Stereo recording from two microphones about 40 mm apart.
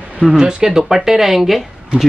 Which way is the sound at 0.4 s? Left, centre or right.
Centre.